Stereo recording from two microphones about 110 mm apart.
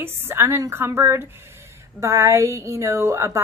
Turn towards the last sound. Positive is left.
turn(degrees=-25)  # may be behind; listen again after turning